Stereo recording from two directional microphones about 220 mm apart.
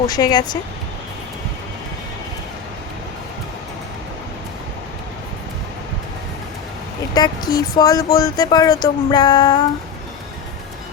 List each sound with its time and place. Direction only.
0.1 s speech: 20° left (ahead or behind)
7.1 s speech: 20° left (ahead or behind)